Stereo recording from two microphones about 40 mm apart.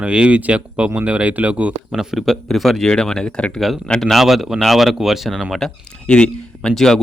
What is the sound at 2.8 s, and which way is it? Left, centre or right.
Speech, centre.